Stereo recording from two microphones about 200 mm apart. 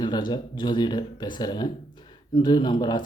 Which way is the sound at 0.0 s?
20° left (ahead or behind).